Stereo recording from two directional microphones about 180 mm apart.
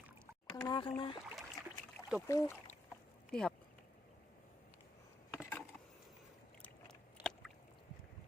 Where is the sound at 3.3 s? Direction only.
5° left (ahead or behind).